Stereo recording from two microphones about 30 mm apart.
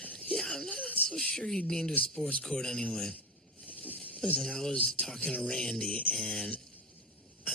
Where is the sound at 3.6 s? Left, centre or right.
Left.